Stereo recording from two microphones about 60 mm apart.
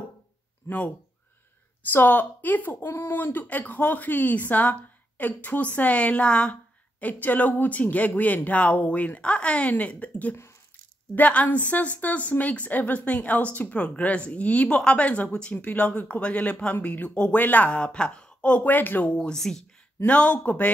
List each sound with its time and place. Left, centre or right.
0.7 s a woman's voice: left
2.0 s a woman's voice: left
15.5 s a woman's voice: left
18.6 s a woman's voice: left
19.1 s speech: centre
20.1 s a woman's voice: left